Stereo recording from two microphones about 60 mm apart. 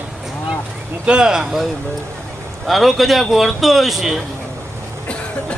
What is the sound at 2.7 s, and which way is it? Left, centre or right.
A man's voice, centre.